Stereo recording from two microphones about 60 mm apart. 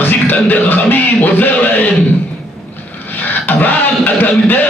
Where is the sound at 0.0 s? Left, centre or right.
Left.